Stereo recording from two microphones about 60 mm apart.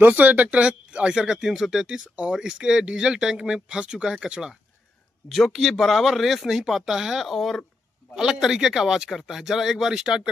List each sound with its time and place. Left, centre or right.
0.0 s speech: right; by 10.3 s centre